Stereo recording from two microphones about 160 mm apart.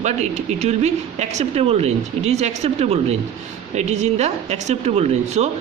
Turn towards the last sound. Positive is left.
turn(degrees=-45)  # may be behind; listen again after turning